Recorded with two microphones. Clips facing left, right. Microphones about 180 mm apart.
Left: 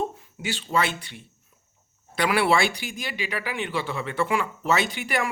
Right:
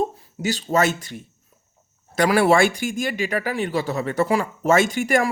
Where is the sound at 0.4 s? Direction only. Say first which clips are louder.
Right 6 dB; 40° right (ahead or behind).